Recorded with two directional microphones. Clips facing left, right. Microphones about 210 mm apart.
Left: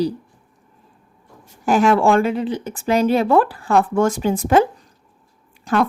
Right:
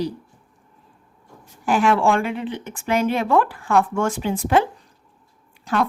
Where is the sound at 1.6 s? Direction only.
40° left (ahead or behind).